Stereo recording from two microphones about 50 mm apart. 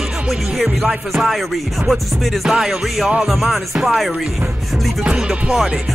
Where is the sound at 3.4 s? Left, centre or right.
Right.